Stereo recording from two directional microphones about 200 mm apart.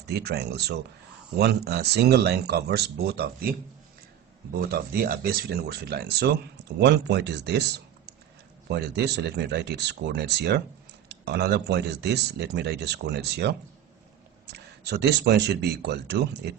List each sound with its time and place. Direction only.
0.1 s speech: 55° right (ahead or behind)
4.5 s speech: 50° right (ahead or behind)